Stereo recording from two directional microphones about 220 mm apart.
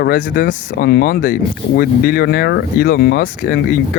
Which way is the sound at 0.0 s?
40° left (ahead or behind).